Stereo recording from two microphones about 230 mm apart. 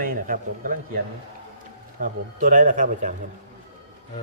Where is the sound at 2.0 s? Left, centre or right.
Right.